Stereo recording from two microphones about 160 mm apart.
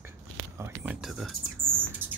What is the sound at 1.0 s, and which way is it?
Speech, centre (ahead or behind).